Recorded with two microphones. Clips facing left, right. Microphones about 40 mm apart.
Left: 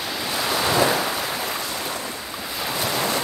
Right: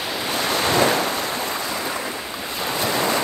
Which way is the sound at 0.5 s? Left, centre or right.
Right.